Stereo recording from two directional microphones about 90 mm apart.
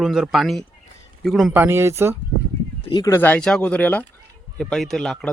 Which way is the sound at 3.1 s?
20° left (ahead or behind).